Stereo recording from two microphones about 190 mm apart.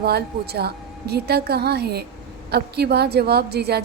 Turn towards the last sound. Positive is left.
turn(degrees=-60)  # may be behind; listen again after turning